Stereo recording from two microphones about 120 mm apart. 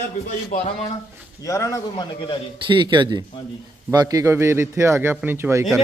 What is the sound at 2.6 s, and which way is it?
A man's voice, 40° right (ahead or behind).